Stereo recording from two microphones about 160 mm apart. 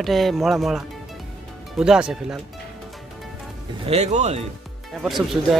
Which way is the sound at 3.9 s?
45° right (ahead or behind).